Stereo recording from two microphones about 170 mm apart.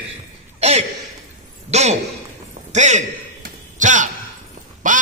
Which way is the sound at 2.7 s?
45° right (ahead or behind).